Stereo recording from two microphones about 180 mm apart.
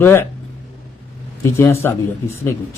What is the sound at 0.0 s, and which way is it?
Speech, 15° left (ahead or behind).